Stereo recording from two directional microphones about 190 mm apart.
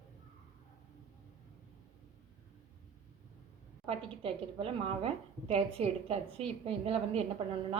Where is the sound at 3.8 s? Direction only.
30° right (ahead or behind).